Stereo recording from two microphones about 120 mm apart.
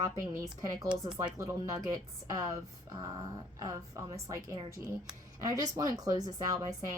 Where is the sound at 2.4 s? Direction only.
25° right (ahead or behind).